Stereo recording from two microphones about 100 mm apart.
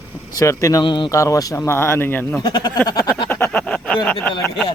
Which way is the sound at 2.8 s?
40° left (ahead or behind).